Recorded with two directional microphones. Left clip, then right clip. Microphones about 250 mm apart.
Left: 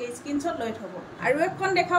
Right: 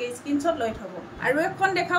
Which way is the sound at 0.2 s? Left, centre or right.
Centre.